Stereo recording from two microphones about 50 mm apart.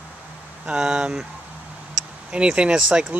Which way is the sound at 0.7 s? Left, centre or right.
Centre.